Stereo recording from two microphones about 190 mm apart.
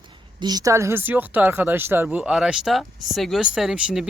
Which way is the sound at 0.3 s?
20° right (ahead or behind).